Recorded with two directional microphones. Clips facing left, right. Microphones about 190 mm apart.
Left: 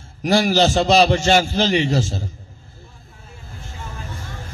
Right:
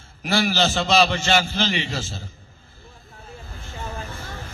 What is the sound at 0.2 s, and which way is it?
A man's voice, 45° left (ahead or behind).